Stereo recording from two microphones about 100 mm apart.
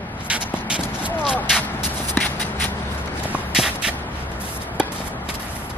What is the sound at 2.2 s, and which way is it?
Shuffle, 15° left (ahead or behind).